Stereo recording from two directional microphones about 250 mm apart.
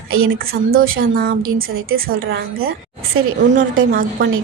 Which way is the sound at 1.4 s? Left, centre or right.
Right.